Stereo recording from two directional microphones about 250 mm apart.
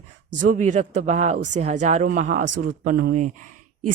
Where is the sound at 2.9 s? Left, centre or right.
Right.